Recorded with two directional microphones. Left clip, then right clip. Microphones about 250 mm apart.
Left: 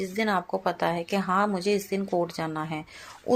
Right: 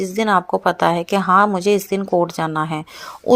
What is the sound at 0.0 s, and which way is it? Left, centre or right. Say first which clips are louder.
Speech: right 10 dB; right.